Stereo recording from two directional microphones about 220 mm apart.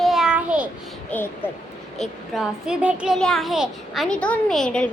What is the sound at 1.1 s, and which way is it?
A woman's voice, 5° left (ahead or behind).